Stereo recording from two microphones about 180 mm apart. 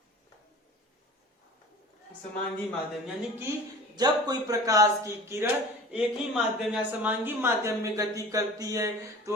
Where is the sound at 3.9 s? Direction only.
20° right (ahead or behind).